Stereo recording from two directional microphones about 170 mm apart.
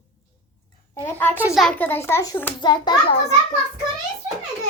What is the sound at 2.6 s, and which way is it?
Speech, 25° left (ahead or behind).